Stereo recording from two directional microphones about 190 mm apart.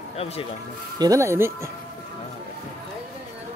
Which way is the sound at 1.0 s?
15° right (ahead or behind).